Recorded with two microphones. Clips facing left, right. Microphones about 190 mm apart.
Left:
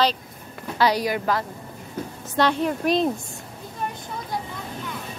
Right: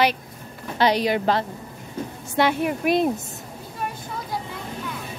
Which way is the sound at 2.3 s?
10° right (ahead or behind).